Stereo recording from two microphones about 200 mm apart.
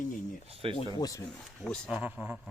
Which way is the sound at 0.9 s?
20° left (ahead or behind).